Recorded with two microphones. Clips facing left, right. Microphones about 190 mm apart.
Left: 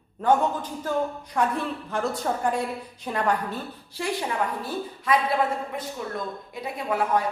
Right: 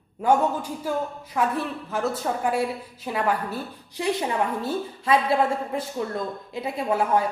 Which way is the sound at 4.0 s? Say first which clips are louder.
Right 4 dB; 20° right (ahead or behind).